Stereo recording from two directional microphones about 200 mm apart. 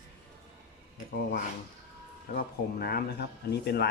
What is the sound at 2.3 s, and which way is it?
Speech, 50° left (ahead or behind).